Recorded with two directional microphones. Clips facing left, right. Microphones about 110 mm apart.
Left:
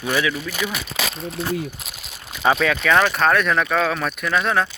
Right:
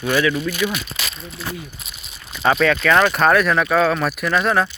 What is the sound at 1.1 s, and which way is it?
Speech, 60° left (ahead or behind).